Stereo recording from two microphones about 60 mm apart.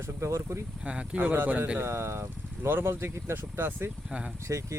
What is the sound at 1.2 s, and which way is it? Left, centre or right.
Speech, right.